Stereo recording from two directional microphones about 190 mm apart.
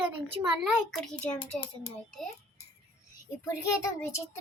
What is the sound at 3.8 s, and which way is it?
Speech, 15° left (ahead or behind).